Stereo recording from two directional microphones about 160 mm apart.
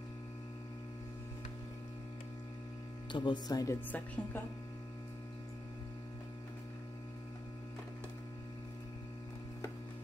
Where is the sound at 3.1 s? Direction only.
30° left (ahead or behind).